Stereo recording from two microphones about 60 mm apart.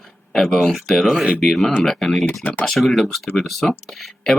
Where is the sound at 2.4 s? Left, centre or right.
Left.